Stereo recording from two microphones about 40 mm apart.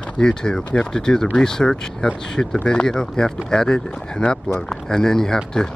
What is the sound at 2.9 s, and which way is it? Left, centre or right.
Speech, centre.